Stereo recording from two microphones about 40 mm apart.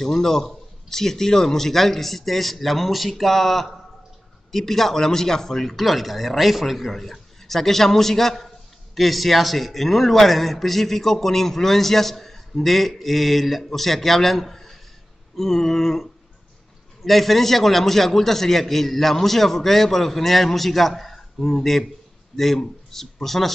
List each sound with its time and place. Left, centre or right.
0.0 s a man's voice: centre